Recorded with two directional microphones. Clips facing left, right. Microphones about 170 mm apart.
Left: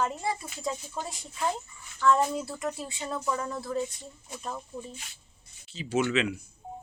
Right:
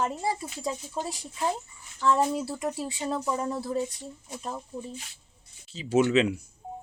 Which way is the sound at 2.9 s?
35° right (ahead or behind).